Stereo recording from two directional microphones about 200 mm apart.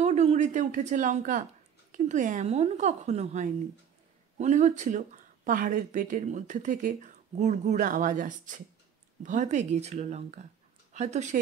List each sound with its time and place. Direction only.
0.0 s speech: 35° right (ahead or behind)